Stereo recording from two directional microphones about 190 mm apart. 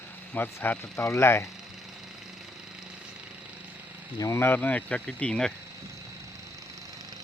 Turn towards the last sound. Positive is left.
turn(degrees=5)  # may be behind; listen again after turning